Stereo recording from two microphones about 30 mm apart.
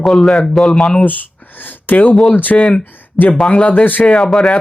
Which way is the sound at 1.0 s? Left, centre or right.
Left.